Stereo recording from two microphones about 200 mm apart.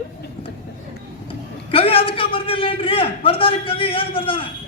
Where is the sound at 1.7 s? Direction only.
30° left (ahead or behind).